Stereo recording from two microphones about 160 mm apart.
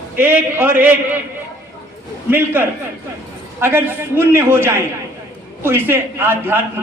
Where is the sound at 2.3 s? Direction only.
10° right (ahead or behind).